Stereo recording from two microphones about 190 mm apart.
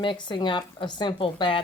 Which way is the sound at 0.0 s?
25° left (ahead or behind).